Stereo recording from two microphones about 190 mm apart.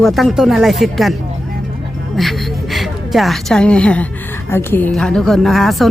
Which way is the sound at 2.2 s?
Centre (ahead or behind).